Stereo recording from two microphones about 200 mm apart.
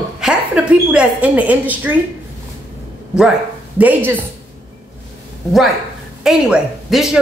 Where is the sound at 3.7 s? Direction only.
10° right (ahead or behind).